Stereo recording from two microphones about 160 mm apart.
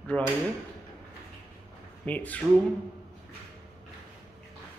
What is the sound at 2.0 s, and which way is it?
Speech, 10° left (ahead or behind).